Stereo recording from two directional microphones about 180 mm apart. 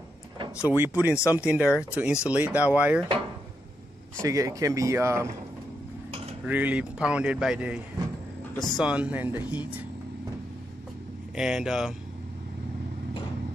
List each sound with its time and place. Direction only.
0.9 s speech: 10° right (ahead or behind)
4.2 s speech: 20° right (ahead or behind)
6.4 s speech: 10° right (ahead or behind)
11.3 s speech: 5° right (ahead or behind)